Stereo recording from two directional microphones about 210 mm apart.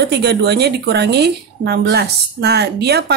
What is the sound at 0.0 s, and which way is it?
A woman's voice, 50° right (ahead or behind).